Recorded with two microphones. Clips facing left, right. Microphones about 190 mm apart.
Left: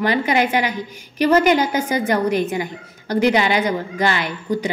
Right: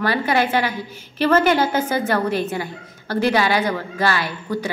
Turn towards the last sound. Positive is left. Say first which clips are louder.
# left 2 dB
turn(degrees=20)  # may be behind; listen again after turning